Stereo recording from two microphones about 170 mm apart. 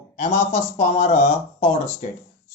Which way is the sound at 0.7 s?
40° left (ahead or behind).